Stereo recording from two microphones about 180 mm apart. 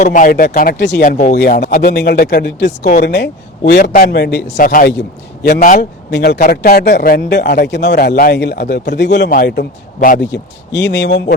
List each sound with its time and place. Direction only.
0.0 s a man's voice: 45° left (ahead or behind); by 1.0 s 70° left (ahead or behind)
1.0 s speech: 40° left (ahead or behind)
1.4 s a man's voice: 60° left (ahead or behind)
2.8 s speech: 45° left (ahead or behind)
3.7 s a man's voice: 65° left (ahead or behind); by 4.9 s 50° left (ahead or behind)
4.9 s a man's voice: 70° left (ahead or behind); by 5.9 s 50° left (ahead or behind)
6.1 s speech: 70° left (ahead or behind)
6.4 s a man's voice: 55° left (ahead or behind); by 9.3 s 75° left (ahead or behind)
9.3 s a man's voice: 60° left (ahead or behind)
10.3 s speech: 75° left (ahead or behind)